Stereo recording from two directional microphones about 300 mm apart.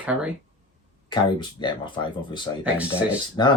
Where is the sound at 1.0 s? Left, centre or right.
Centre.